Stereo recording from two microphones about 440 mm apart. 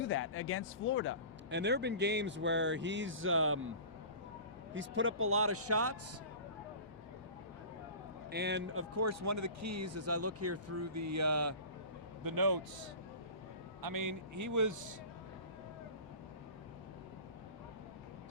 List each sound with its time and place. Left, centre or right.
0.0 s speech: left
1.5 s speech: right
4.7 s speech: right
8.3 s speech: right
12.2 s a man's voice: right